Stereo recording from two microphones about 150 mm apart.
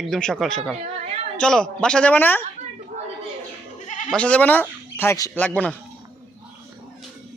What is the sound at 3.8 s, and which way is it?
Goat, 55° left (ahead or behind).